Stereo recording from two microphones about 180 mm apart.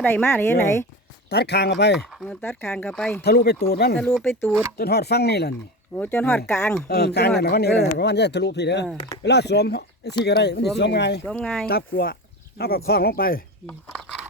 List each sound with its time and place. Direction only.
0.0 s speech: 10° left (ahead or behind)
1.3 s speech: 65° left (ahead or behind)
2.0 s speech: centre (ahead or behind)
3.2 s speech: 60° left (ahead or behind)
3.9 s speech: 5° left (ahead or behind)
4.8 s speech: 65° left (ahead or behind)
6.0 s speech: 10° left (ahead or behind)
6.8 s speech: 60° left (ahead or behind)
11.3 s speech: 5° left (ahead or behind)
11.6 s speech: 60° left (ahead or behind)